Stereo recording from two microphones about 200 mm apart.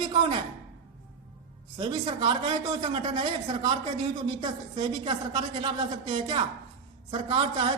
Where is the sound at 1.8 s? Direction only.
25° right (ahead or behind).